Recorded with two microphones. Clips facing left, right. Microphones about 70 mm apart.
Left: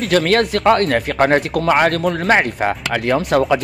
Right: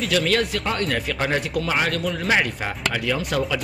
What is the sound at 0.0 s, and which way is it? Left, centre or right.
Speech, left.